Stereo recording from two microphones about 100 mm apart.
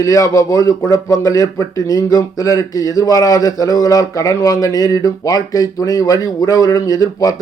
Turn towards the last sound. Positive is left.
turn(degrees=35)  # may be behind; listen again after turning